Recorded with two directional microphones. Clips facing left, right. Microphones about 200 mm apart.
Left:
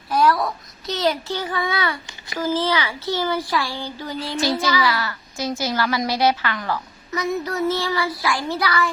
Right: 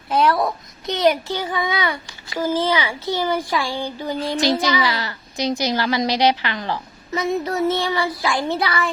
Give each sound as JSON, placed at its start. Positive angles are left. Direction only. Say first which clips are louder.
{"t": 0.1, "sound": "a child's voice", "louder": "right 1 dB", "side_deg": -25}